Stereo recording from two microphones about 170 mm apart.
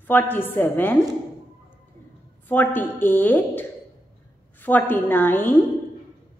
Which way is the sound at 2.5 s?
10° left (ahead or behind).